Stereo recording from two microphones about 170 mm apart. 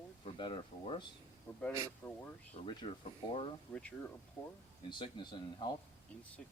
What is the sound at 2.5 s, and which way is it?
Speech, 30° left (ahead or behind).